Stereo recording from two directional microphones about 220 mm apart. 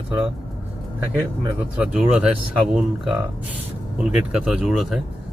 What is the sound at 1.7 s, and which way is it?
Speech, 5° right (ahead or behind).